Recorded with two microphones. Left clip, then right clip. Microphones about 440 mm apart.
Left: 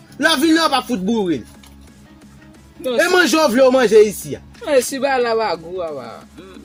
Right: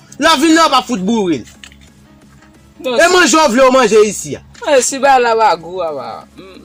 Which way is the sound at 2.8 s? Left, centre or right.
Left.